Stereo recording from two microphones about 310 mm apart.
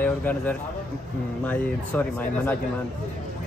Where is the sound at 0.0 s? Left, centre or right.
Centre.